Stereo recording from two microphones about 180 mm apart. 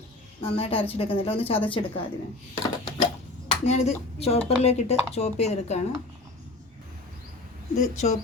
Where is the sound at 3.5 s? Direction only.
40° left (ahead or behind).